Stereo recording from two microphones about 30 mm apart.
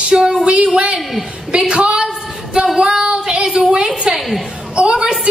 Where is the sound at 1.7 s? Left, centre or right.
Right.